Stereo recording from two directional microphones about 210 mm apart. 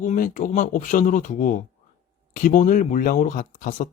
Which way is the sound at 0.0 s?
35° left (ahead or behind).